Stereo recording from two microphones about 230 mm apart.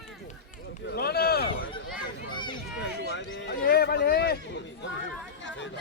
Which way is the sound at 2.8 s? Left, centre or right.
Left.